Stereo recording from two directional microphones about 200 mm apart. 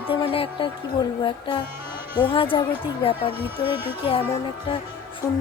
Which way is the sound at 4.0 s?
25° left (ahead or behind).